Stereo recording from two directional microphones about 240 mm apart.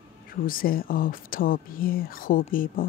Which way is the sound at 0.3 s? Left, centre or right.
Left.